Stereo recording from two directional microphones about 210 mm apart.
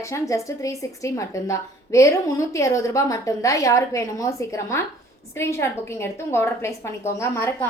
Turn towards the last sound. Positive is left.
turn(degrees=10)  # may be behind; listen again after turning